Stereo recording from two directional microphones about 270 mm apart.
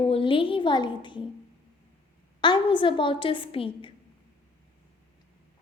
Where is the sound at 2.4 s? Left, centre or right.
Centre.